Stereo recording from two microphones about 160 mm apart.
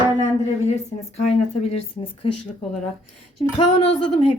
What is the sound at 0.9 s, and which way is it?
Speech, 45° left (ahead or behind).